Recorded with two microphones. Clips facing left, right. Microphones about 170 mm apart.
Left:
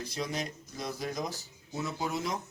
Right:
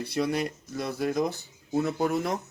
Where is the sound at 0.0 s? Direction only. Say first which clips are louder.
Right 8 dB; 60° right (ahead or behind).